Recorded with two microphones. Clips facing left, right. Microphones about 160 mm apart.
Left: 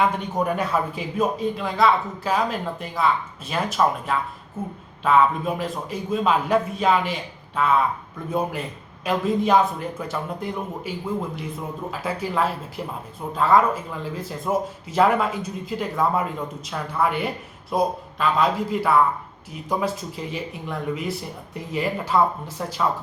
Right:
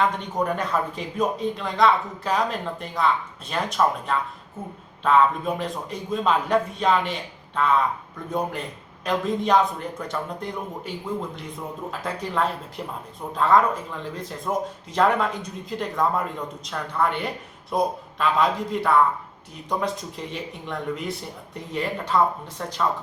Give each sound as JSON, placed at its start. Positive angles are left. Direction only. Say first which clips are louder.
{"t": 0.0, "sound": "speech", "louder": "left 1 dB", "side_deg": 10}